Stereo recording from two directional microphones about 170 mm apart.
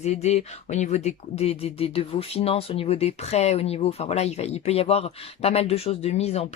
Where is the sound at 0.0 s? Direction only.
40° left (ahead or behind).